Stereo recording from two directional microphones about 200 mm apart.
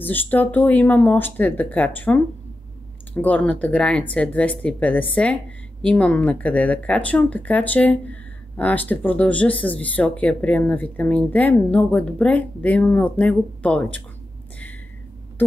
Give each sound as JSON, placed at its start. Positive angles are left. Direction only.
{"t": 0.0, "sound": "speech", "side_deg": 10}